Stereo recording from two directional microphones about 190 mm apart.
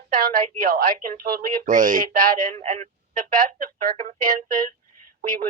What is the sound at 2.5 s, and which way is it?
Speech, 35° right (ahead or behind).